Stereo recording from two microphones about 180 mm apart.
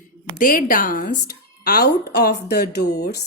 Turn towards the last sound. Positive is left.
turn(degrees=65)  # may be behind; listen again after turning